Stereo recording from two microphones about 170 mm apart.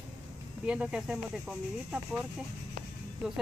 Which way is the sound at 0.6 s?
5° right (ahead or behind).